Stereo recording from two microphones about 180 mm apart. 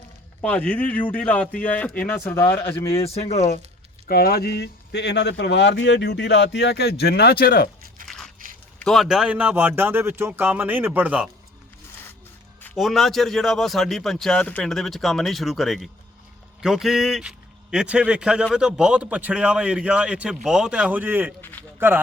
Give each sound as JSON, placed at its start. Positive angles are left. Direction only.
{"t": 0.4, "sound": "speech", "side_deg": 5}
{"t": 3.0, "sound": "speech", "side_deg": 35}
{"t": 4.1, "sound": "speech", "side_deg": 60}
{"t": 8.0, "sound": "biting", "side_deg": 5}
{"t": 8.8, "sound": "speech", "side_deg": 0}
{"t": 12.7, "sound": "a man's voice", "side_deg": 0}